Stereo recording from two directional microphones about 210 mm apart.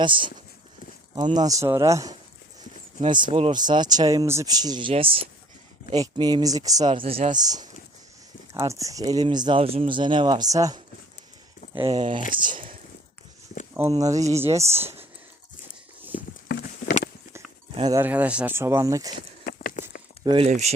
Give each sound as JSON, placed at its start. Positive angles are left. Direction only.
{"t": 0.0, "sound": "speech", "side_deg": -25}
{"t": 1.4, "sound": "speech", "side_deg": -15}
{"t": 11.7, "sound": "speech", "side_deg": -25}
{"t": 13.8, "sound": "speech", "side_deg": -30}
{"t": 14.1, "sound": "speech", "side_deg": -15}
{"t": 16.5, "sound": "a sound", "side_deg": 55}
{"t": 17.7, "sound": "speech", "side_deg": -20}
{"t": 18.0, "sound": "speech", "side_deg": -5}
{"t": 19.2, "sound": "a sound", "side_deg": 40}
{"t": 20.2, "sound": "speech", "side_deg": -25}